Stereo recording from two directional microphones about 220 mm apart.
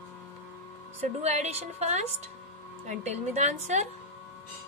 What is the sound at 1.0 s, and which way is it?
A woman's voice, 30° right (ahead or behind).